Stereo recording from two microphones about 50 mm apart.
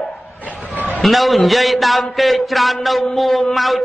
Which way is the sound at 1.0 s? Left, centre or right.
Centre.